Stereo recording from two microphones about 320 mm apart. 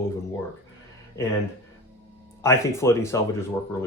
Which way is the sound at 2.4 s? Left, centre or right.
Centre.